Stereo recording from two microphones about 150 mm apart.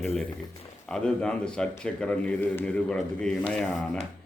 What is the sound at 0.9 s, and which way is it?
Speech, 5° left (ahead or behind).